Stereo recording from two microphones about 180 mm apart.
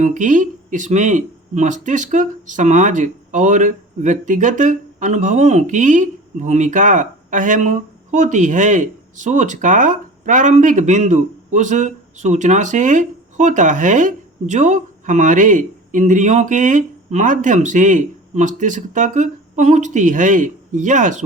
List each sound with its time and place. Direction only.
0.0 s speech: 45° right (ahead or behind)